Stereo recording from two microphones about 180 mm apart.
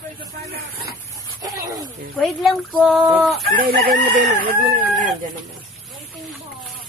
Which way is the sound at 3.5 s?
55° right (ahead or behind).